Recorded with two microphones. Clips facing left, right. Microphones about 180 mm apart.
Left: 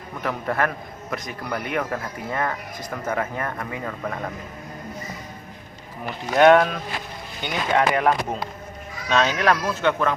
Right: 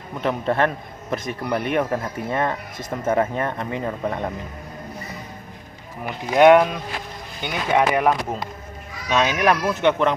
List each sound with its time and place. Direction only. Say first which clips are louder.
0.2 s speech: right 4 dB; 25° right (ahead or behind)
6.1 s speech: right 2 dB; 10° right (ahead or behind)